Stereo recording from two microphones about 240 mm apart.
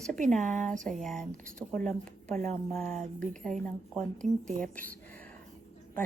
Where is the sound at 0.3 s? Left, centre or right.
Centre.